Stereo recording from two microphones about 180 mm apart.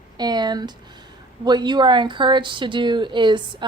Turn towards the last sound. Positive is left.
turn(degrees=-25)  # may be behind; listen again after turning